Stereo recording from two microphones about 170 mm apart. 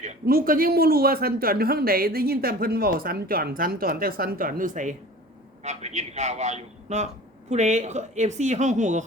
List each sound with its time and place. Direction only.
0.3 s speech: 60° right (ahead or behind)